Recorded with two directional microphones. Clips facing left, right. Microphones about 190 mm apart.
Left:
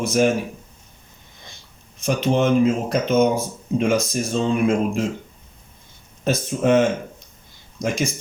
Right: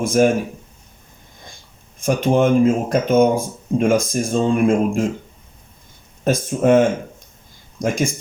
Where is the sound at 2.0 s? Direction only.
50° right (ahead or behind).